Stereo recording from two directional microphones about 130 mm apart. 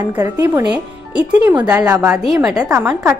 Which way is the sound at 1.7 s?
25° right (ahead or behind).